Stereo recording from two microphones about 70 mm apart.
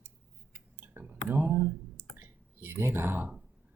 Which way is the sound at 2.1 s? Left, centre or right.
Right.